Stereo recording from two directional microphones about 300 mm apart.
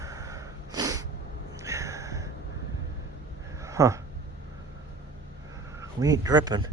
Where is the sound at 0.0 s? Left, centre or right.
Centre.